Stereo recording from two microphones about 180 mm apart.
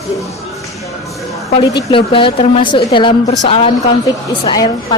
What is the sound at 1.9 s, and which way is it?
A woman's voice, 30° left (ahead or behind).